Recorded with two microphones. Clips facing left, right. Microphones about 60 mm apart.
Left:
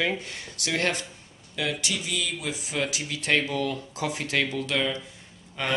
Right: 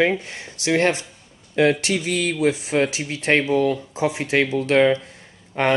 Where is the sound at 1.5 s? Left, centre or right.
Right.